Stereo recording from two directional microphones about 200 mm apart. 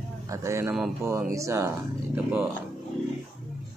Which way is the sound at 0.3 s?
15° right (ahead or behind).